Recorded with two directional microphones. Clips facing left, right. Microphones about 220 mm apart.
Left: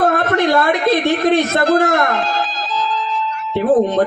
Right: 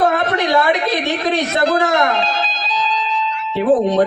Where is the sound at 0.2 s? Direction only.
50° left (ahead or behind).